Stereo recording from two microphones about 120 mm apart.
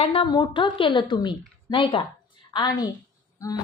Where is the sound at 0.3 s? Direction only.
40° left (ahead or behind).